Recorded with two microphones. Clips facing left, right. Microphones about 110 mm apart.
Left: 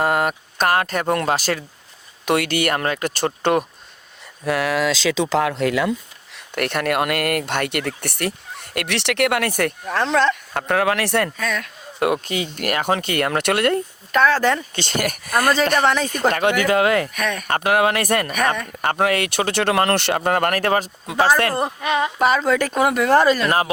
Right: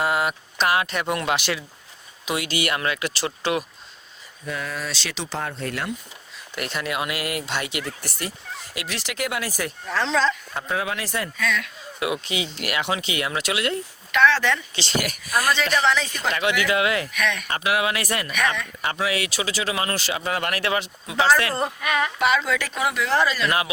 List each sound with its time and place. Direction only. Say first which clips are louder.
0.0 s speech: left 4 dB; 45° left (ahead or behind)
2.2 s speech: left 6 dB; 55° left (ahead or behind)
4.4 s speech: left 10 dB; 85° left
6.3 s speech: left 7 dB; 60° left (ahead or behind)
11.3 s speech: left 1 dB; 45° left (ahead or behind)
21.8 s speech: left 3 dB; 25° left (ahead or behind)
22.2 s speech: left 6 dB; 40° left (ahead or behind)